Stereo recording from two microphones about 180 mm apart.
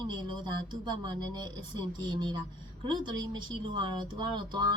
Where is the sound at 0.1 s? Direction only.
25° right (ahead or behind).